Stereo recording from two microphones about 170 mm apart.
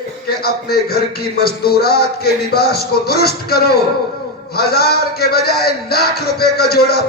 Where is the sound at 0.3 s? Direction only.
65° left (ahead or behind).